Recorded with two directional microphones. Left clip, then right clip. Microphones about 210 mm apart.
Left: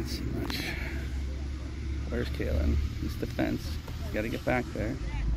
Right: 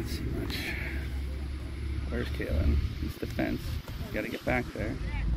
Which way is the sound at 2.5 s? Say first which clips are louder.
Left 1 dB; 55° left (ahead or behind).